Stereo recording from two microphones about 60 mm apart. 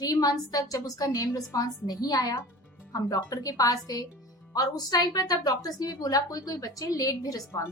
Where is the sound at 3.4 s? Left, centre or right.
Left.